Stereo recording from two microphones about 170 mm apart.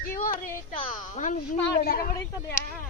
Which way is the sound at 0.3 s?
55° left (ahead or behind).